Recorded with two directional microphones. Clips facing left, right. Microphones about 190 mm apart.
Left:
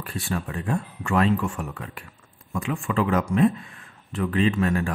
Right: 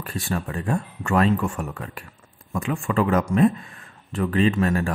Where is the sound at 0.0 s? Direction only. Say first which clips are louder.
Right 2 dB; 40° right (ahead or behind).